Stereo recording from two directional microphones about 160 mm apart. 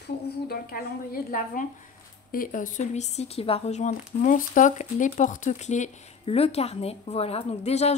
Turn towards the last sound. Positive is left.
turn(degrees=40)  # may be behind; listen again after turning